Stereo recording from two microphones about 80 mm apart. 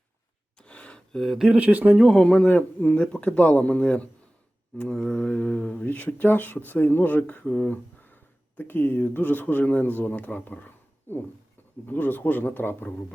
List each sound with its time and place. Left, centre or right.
0.6 s a sound: centre
1.5 s speech: centre
2.0 s speech: centre; by 13.1 s left